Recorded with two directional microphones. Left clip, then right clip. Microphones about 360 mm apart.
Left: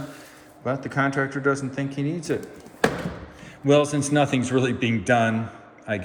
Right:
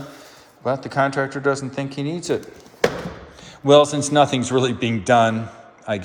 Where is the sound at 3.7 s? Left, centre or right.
Centre.